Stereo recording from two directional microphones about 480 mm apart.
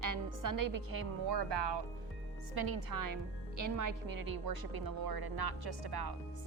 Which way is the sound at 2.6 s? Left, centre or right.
Right.